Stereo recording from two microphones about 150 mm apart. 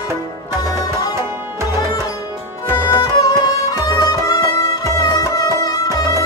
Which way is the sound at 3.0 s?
25° left (ahead or behind).